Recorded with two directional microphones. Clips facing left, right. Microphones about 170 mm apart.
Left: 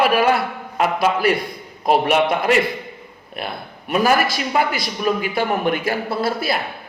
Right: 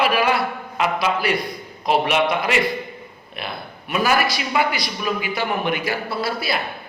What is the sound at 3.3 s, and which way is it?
A man's voice, 45° left (ahead or behind).